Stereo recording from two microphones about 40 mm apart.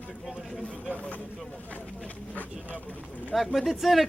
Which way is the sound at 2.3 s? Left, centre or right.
Left.